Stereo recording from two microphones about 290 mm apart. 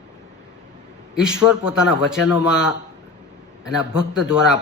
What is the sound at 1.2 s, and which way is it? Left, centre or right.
Speech, centre.